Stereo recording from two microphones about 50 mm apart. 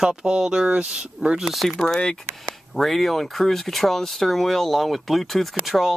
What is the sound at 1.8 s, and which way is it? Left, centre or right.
Speech, centre.